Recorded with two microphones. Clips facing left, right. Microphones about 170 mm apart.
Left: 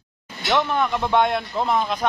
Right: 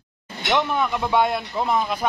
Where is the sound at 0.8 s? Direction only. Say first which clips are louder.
Left 1 dB; 5° right (ahead or behind).